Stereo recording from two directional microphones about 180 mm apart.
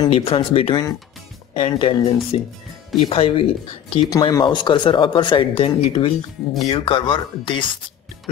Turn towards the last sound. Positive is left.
turn(degrees=25)  # may be behind; listen again after turning